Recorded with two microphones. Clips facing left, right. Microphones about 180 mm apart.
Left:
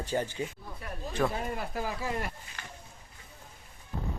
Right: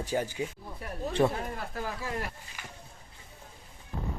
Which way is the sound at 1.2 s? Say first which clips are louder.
Right 4 dB; 20° right (ahead or behind).